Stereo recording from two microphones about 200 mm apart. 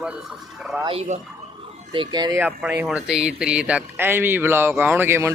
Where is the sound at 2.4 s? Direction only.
10° right (ahead or behind).